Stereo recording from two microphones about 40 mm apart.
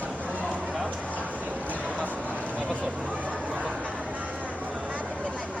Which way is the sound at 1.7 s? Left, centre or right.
Right.